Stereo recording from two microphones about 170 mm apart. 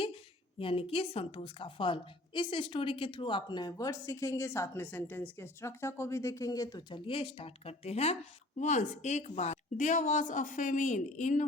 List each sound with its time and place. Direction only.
0.6 s a woman's voice: 30° left (ahead or behind)